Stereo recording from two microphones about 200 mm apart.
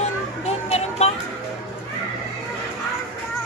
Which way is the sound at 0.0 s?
30° left (ahead or behind).